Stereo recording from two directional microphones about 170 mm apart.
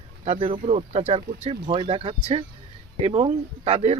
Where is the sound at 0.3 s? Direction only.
35° right (ahead or behind).